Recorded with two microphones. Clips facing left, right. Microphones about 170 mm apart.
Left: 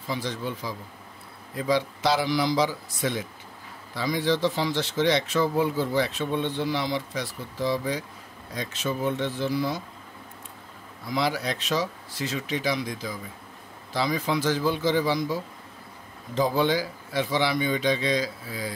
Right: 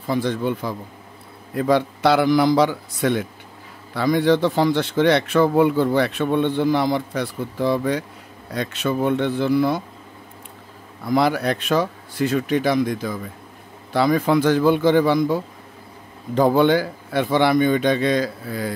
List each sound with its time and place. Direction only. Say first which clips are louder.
0.0 s speech: right 9 dB; 55° right (ahead or behind)
11.1 s speech: right 8 dB; 55° right (ahead or behind)